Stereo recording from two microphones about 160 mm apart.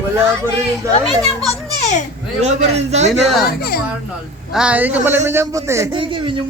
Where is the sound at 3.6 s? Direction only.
75° left (ahead or behind).